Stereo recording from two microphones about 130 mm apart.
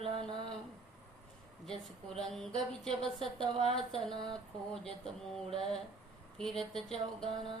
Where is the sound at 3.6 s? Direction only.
50° left (ahead or behind).